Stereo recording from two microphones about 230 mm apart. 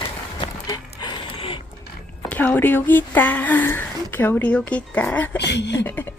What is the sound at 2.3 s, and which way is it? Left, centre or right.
Speech, centre.